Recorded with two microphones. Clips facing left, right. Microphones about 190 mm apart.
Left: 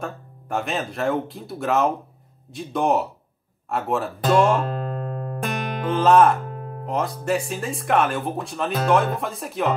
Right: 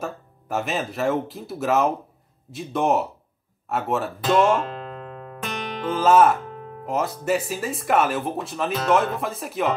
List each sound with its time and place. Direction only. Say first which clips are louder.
0.0 s speech: right 1 dB; 5° right (ahead or behind)
4.6 s music: left 5 dB; 45° left (ahead or behind)
5.9 s speech: left 1 dB; centre (ahead or behind)
6.4 s music: left 2 dB; 50° left (ahead or behind)
6.9 s speech: even; centre (ahead or behind)